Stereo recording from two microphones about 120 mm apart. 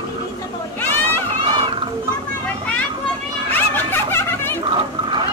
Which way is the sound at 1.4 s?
45° right (ahead or behind).